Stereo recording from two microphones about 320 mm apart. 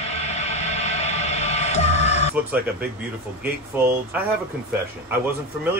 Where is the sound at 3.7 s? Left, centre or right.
Centre.